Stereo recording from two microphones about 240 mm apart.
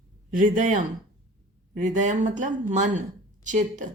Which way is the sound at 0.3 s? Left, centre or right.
Right.